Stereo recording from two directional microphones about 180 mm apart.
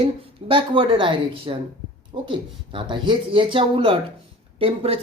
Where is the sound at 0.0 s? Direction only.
30° right (ahead or behind).